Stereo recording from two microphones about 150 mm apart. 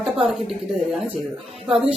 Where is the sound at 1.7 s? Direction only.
5° right (ahead or behind).